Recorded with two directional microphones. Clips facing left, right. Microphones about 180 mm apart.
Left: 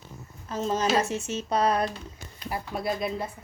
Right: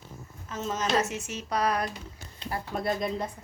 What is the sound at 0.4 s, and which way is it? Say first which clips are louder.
A woman's voice: left 5 dB; 35° left (ahead or behind).